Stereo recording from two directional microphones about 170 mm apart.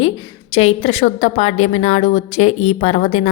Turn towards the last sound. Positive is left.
turn(degrees=40)  # may be behind; listen again after turning